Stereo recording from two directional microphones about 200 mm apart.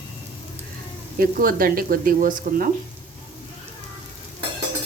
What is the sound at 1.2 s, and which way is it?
A woman's voice, 45° right (ahead or behind).